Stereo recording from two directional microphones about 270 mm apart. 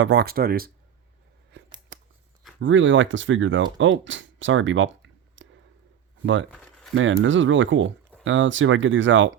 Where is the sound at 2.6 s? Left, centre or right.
Right.